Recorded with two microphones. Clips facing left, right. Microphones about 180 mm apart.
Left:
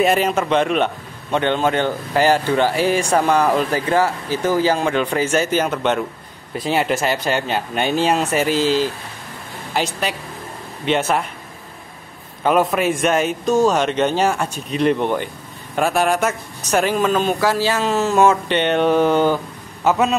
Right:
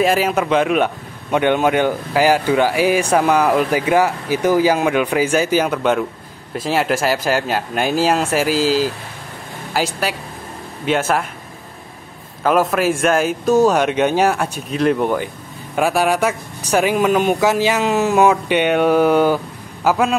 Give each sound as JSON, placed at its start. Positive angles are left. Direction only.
{"t": 0.0, "sound": "speech", "side_deg": 0}
{"t": 12.4, "sound": "speech", "side_deg": -5}